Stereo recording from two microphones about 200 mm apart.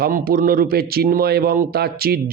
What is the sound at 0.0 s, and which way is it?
A man's voice, 45° right (ahead or behind).